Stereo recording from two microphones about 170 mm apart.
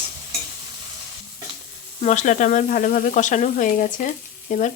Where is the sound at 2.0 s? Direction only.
45° left (ahead or behind).